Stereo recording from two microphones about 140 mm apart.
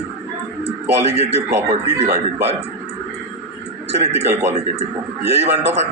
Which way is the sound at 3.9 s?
50° right (ahead or behind).